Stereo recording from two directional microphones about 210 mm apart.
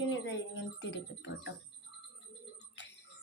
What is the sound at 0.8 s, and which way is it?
Speech, 60° left (ahead or behind).